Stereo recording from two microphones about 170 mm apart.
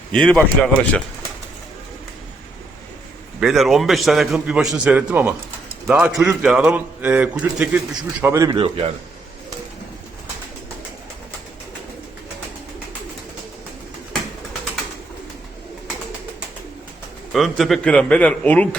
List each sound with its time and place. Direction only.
0.1 s a man's voice: 5° left (ahead or behind)
3.4 s a man's voice: centre (ahead or behind)
8.2 s a man's voice: 20° right (ahead or behind)
17.3 s a man's voice: centre (ahead or behind)